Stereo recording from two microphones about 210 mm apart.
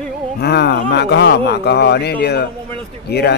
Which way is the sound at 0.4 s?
50° left (ahead or behind).